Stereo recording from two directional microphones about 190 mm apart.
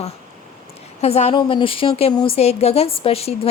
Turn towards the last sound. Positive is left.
turn(degrees=30)  # may be behind; listen again after turning